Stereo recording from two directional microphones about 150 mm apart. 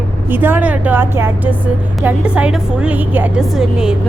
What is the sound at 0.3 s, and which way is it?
A woman's voice, 15° right (ahead or behind).